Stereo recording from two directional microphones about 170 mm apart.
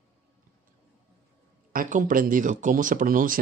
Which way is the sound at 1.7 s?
55° right (ahead or behind).